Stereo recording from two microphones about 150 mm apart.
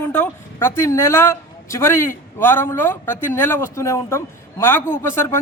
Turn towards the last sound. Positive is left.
turn(degrees=15)  # may be behind; listen again after turning